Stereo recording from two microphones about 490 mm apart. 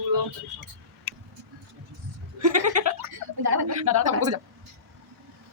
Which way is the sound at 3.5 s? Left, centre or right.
Right.